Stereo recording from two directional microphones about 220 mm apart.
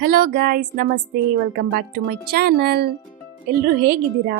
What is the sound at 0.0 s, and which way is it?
A woman's voice, 40° right (ahead or behind).